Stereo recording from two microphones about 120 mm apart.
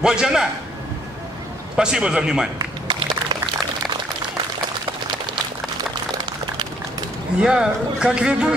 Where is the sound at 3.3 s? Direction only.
35° right (ahead or behind).